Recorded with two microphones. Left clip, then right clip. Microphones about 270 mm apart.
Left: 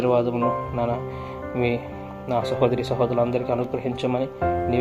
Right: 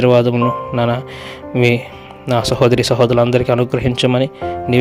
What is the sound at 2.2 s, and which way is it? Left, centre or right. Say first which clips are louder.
Speech: right 8 dB; right.